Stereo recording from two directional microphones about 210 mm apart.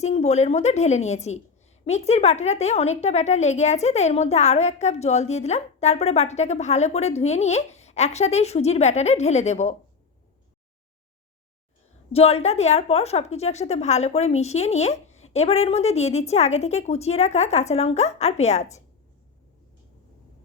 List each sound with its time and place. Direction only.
0.0 s a woman's voice: 30° left (ahead or behind)
12.1 s a woman's voice: 30° left (ahead or behind)